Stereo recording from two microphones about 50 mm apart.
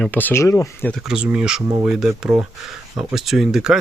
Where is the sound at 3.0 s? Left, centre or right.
Centre.